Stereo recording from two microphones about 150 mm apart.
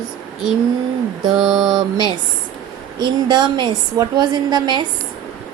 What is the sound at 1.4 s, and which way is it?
Mantra, centre (ahead or behind).